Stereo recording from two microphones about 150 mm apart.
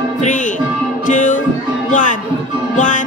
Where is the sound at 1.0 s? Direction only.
60° left (ahead or behind).